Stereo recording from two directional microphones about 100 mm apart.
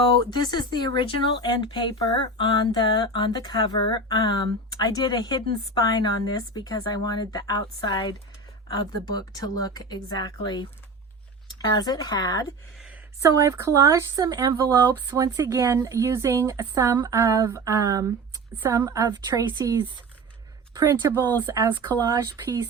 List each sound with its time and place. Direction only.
0.3 s speech: 45° left (ahead or behind)
13.2 s speech: 30° right (ahead or behind)
21.4 s speech: 25° right (ahead or behind)
21.8 s speech: 45° right (ahead or behind)